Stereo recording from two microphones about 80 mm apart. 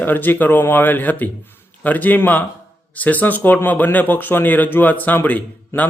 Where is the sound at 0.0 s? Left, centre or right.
Left.